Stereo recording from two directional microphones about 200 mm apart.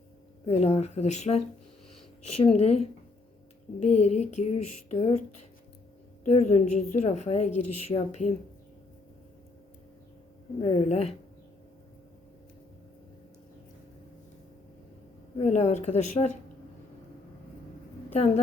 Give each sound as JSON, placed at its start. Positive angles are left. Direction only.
{"t": 0.4, "sound": "a woman's voice", "side_deg": 30}
{"t": 6.2, "sound": "a woman's voice", "side_deg": 30}
{"t": 10.6, "sound": "a woman's voice", "side_deg": 30}
{"t": 15.4, "sound": "a woman's voice", "side_deg": 35}